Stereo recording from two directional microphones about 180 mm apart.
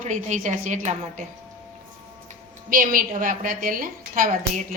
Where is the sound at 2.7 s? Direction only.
50° right (ahead or behind).